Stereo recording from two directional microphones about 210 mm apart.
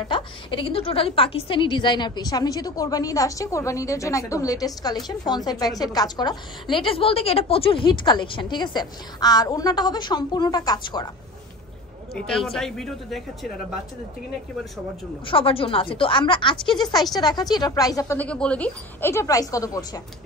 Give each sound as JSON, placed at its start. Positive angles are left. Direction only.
{"t": 0.1, "sound": "a woman's voice", "side_deg": 25}
{"t": 12.3, "sound": "speech", "side_deg": 0}
{"t": 15.2, "sound": "a woman's voice", "side_deg": 25}